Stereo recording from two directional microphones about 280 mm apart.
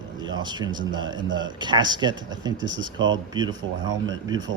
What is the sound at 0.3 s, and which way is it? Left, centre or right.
Speech, centre.